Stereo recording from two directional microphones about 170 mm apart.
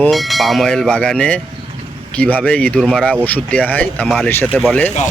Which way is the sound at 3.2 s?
10° left (ahead or behind).